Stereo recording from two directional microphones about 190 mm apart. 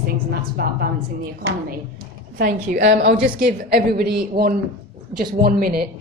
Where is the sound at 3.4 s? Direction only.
55° right (ahead or behind).